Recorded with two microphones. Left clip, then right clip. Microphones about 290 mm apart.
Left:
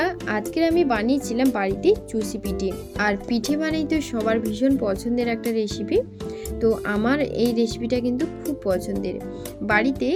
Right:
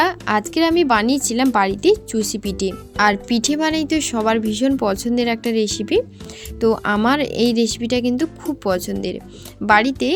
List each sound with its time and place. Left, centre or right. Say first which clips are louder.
0.0 s speech: right 6 dB; right